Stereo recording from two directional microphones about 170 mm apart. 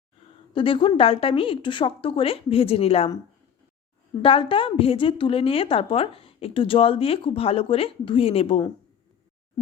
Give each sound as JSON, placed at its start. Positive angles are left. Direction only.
{"t": 0.5, "sound": "a woman's voice", "side_deg": 30}
{"t": 4.2, "sound": "a woman's voice", "side_deg": 30}